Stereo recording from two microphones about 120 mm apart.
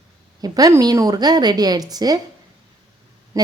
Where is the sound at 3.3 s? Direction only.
25° right (ahead or behind).